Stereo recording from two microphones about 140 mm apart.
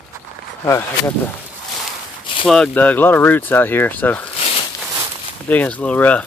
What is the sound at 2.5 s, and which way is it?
Speech, 10° left (ahead or behind).